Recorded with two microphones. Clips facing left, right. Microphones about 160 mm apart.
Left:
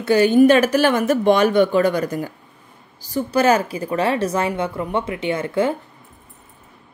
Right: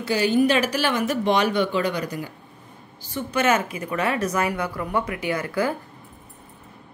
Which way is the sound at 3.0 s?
35° left (ahead or behind).